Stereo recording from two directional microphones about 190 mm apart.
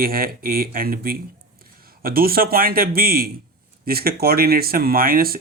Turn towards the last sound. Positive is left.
turn(degrees=-50)  # may be behind; listen again after turning